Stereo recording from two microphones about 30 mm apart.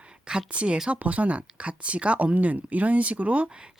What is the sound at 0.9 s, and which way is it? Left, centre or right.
Speech, right.